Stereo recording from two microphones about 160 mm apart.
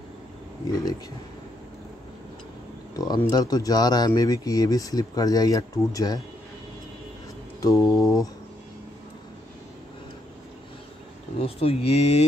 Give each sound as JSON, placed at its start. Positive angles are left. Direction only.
{"t": 0.7, "sound": "speech", "side_deg": 25}
{"t": 3.3, "sound": "speech", "side_deg": 25}
{"t": 7.6, "sound": "speech", "side_deg": 20}
{"t": 11.4, "sound": "speech", "side_deg": 40}